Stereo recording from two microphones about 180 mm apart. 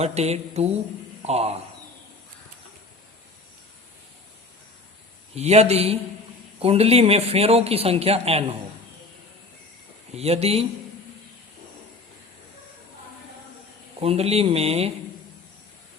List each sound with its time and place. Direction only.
0.0 s a man's voice: 35° right (ahead or behind)
5.3 s a man's voice: 35° right (ahead or behind)
10.2 s a man's voice: 35° right (ahead or behind)
14.0 s a man's voice: 35° right (ahead or behind)